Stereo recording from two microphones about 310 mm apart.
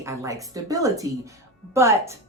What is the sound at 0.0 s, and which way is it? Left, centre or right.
A woman's voice, centre.